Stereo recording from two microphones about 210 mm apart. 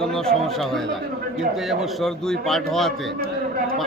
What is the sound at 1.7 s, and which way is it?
A man's voice, centre (ahead or behind).